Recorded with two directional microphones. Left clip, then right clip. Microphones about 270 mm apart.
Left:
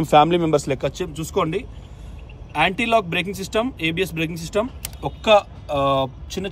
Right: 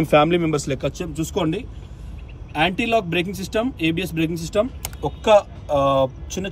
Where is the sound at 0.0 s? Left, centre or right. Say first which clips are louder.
Left 1 dB; centre.